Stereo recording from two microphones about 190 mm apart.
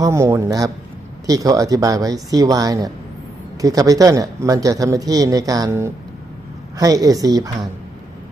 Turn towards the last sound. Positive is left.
turn(degrees=-20)  # may be behind; listen again after turning